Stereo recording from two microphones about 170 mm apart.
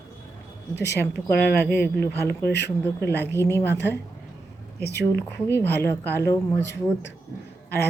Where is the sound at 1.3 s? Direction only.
70° left (ahead or behind).